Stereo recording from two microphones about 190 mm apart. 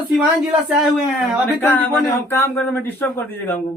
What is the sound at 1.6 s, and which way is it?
Speech, 10° left (ahead or behind).